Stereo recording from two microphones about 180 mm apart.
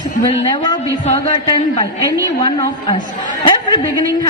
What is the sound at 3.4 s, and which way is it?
Speech, 25° left (ahead or behind).